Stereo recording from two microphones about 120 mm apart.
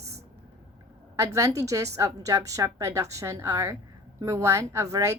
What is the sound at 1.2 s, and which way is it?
A woman's voice, 25° right (ahead or behind).